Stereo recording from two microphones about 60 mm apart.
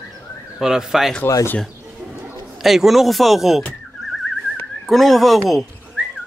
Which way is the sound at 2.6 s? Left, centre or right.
Centre.